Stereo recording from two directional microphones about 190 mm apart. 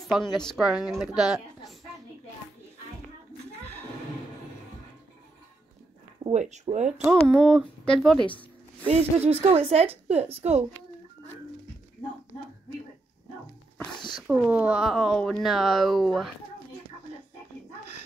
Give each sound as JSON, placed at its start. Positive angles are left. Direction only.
{"t": 0.1, "sound": "a woman's voice", "side_deg": 0}
{"t": 6.3, "sound": "a woman's voice", "side_deg": -40}
{"t": 7.1, "sound": "a woman's voice", "side_deg": 5}
{"t": 9.3, "sound": "a woman's voice", "side_deg": -30}
{"t": 13.9, "sound": "a sound", "side_deg": 25}
{"t": 14.2, "sound": "a woman's voice", "side_deg": -5}